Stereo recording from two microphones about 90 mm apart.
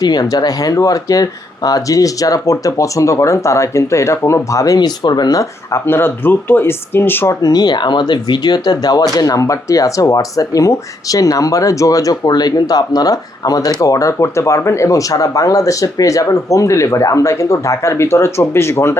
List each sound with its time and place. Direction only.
0.0 s speech: 45° left (ahead or behind)
5.4 s speech: 30° left (ahead or behind)
7.4 s speech: 45° left (ahead or behind)